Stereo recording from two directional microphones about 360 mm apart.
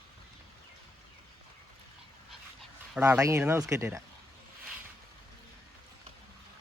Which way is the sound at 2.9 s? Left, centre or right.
Centre.